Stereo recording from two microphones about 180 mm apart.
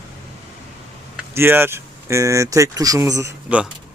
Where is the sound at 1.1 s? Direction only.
10° right (ahead or behind).